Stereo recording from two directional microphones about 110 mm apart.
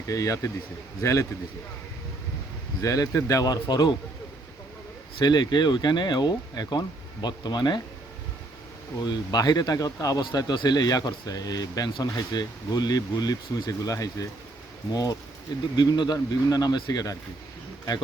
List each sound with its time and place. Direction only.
0.1 s a man's voice: 30° left (ahead or behind)
2.8 s speech: 30° left (ahead or behind)
5.2 s speech: 40° left (ahead or behind)
9.0 s speech: 40° left (ahead or behind)
15.7 s speech: 40° left (ahead or behind)